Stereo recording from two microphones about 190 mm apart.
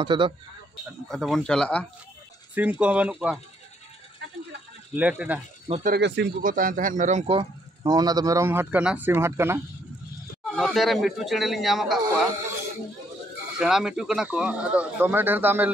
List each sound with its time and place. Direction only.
0.0 s a man's voice: 25° right (ahead or behind)
1.0 s speech: centre (ahead or behind)
2.5 s speech: 10° right (ahead or behind)
4.9 s speech: 5° right (ahead or behind)
5.9 s speech: 65° right (ahead or behind)
6.4 s a man's voice: 45° right (ahead or behind); by 9.6 s 15° right (ahead or behind)
10.4 s speech: centre (ahead or behind)
13.6 s speech: centre (ahead or behind)